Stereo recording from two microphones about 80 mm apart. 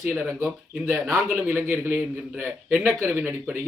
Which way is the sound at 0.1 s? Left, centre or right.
Right.